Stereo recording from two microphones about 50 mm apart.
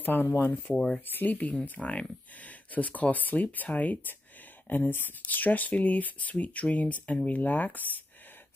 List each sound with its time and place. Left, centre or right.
0.0 s speech: left
0.7 s speech: centre
1.1 s speech: left